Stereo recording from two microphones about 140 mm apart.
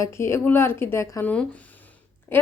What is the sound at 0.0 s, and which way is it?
A woman's voice, 20° left (ahead or behind).